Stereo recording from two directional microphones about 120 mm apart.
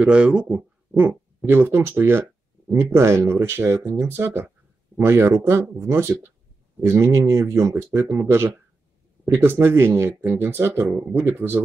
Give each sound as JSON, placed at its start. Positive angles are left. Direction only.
{"t": 0.0, "sound": "speech", "side_deg": -10}